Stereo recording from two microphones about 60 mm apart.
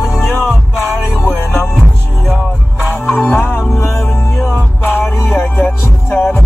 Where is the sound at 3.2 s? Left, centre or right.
Left.